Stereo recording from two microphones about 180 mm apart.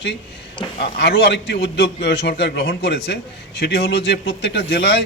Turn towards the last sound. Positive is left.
turn(degrees=65)  # may be behind; listen again after turning